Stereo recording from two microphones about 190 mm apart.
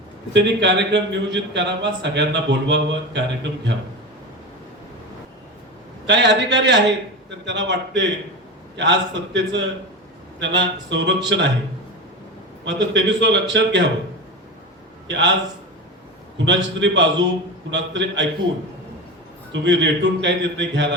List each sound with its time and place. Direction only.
0.3 s a man's voice: 65° right (ahead or behind)
6.1 s a man's voice: 70° right (ahead or behind)
12.6 s a man's voice: 70° right (ahead or behind)
15.0 s a man's voice: 70° right (ahead or behind)
16.5 s a man's voice: 70° right (ahead or behind)
19.6 s a man's voice: 70° right (ahead or behind)